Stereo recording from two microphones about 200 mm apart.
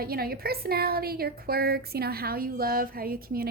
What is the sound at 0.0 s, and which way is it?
A woman's voice, 50° right (ahead or behind).